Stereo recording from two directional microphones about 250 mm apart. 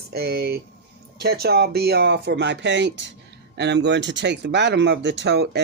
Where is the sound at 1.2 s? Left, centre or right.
Right.